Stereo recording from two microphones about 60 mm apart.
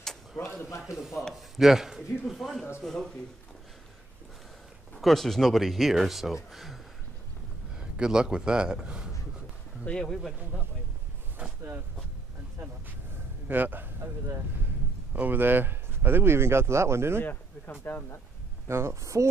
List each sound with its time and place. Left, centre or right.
0.0 s a sound: centre
0.9 s speech: centre
4.9 s speech: centre
8.0 s a man's voice: centre
9.8 s speech: centre
13.5 s speech: right
15.1 s speech: right
17.2 s speech: left
18.7 s speech: right